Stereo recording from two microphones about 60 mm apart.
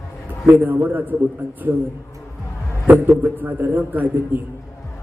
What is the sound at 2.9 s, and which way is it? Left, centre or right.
A man's voice, right.